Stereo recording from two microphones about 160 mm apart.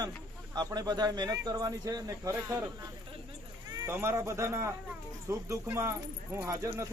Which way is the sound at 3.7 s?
25° right (ahead or behind).